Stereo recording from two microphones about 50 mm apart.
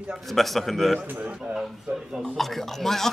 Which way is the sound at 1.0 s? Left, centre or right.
Right.